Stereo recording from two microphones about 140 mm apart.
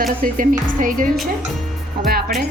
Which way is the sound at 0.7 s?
75° right (ahead or behind).